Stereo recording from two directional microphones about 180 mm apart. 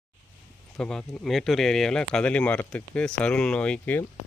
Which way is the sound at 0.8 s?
5° left (ahead or behind).